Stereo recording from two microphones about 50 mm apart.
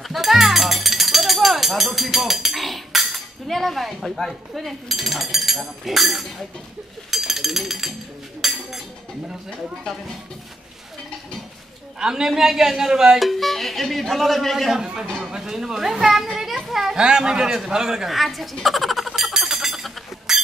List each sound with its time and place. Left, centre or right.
0.1 s speech: centre
7.1 s a sound: centre
12.0 s a man's voice: centre
13.2 s speech: centre
14.7 s a man's voice: centre
18.1 s a sound: centre